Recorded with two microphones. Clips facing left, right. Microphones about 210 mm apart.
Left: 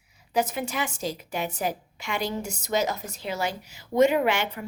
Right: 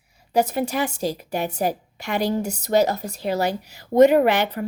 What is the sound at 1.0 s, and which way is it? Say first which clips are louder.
A woman's voice: right 5 dB; 35° right (ahead or behind).